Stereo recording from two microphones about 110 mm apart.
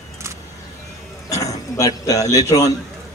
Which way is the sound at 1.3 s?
30° left (ahead or behind).